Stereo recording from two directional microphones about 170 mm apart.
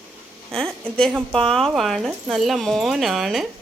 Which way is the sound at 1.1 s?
Centre (ahead or behind).